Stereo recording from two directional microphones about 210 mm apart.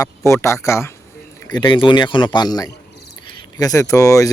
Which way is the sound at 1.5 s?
25° left (ahead or behind).